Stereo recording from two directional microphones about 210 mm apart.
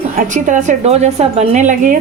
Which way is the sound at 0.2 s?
35° right (ahead or behind).